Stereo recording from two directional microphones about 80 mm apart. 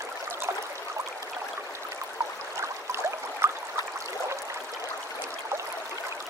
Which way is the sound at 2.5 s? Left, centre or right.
Right.